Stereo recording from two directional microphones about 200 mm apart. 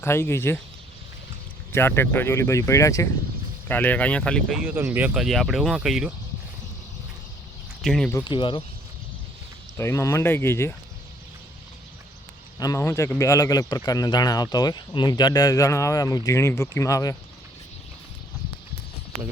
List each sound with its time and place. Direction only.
0.0 s speech: 10° left (ahead or behind)
1.7 s speech: 10° left (ahead or behind)
7.8 s speech: centre (ahead or behind)
8.1 s speech: 25° left (ahead or behind)
9.7 s speech: 15° left (ahead or behind)
12.5 s speech: 15° left (ahead or behind)